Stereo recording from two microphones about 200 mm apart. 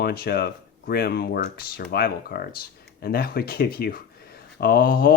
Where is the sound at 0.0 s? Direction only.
50° left (ahead or behind).